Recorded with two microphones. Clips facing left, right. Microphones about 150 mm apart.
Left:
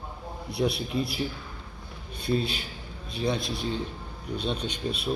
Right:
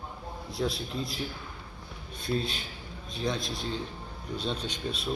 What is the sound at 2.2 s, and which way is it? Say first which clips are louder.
A man's voice: left 4 dB; 5° left (ahead or behind).